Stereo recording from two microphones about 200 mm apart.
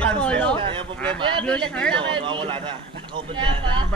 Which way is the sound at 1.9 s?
25° right (ahead or behind).